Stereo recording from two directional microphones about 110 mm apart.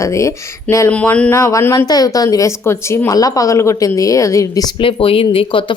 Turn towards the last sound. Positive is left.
turn(degrees=50)  # may be behind; listen again after turning